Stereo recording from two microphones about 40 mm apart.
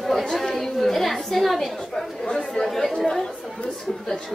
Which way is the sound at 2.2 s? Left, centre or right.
Centre.